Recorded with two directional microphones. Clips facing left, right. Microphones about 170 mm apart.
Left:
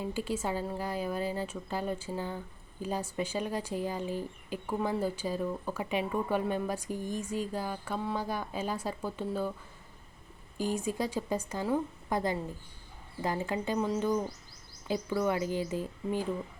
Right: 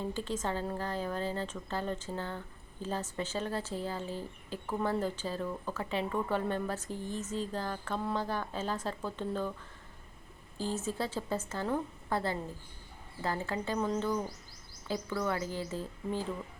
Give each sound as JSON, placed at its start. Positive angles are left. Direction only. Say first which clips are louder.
{"t": 0.0, "sound": "speech", "louder": "left 2 dB", "side_deg": 10}
{"t": 10.6, "sound": "speech", "louder": "left 3 dB", "side_deg": 15}